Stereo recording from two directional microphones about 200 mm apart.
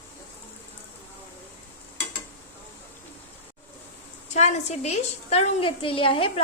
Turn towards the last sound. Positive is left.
turn(degrees=25)  # may be behind; listen again after turning